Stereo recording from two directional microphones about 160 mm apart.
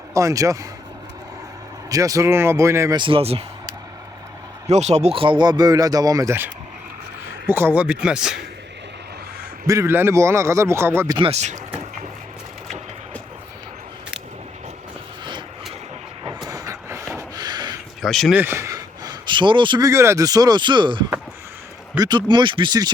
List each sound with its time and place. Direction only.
0.1 s speech: 20° right (ahead or behind)
1.9 s speech: 20° right (ahead or behind)
3.0 s speech: 35° right (ahead or behind)
4.7 s a man's voice: 45° right (ahead or behind); by 8.4 s 5° right (ahead or behind)
9.6 s a man's voice: 15° right (ahead or behind)
11.2 s speech: 40° right (ahead or behind)
15.2 s vehicle: 30° right (ahead or behind)
16.5 s vehicle: 20° right (ahead or behind)
17.3 s a sound: 25° right (ahead or behind)
18.0 s speech: centre (ahead or behind)
18.3 s speech: 15° right (ahead or behind)